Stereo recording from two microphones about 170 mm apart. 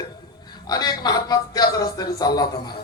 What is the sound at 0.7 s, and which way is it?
A man's voice, 25° left (ahead or behind).